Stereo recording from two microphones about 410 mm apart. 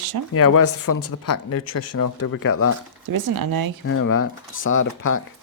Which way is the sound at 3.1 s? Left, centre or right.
Right.